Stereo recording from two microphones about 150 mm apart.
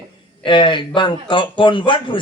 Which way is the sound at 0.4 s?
30° left (ahead or behind).